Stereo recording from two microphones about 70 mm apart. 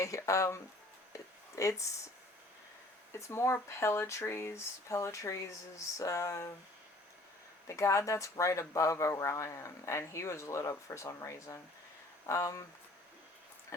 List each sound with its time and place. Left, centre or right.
0.0 s speech: left
1.1 s a sound: left
3.1 s speech: left
7.7 s speech: left